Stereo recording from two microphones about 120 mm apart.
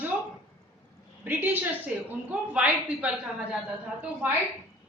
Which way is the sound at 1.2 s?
15° right (ahead or behind).